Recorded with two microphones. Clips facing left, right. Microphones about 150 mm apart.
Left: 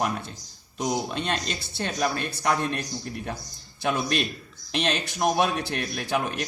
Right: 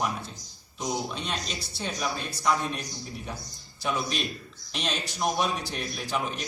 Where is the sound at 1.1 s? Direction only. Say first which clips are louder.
Left 5 dB; 65° left (ahead or behind).